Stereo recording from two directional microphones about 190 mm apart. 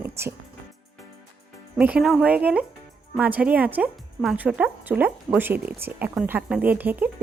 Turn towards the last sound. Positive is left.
turn(degrees=-10)  # may be behind; listen again after turning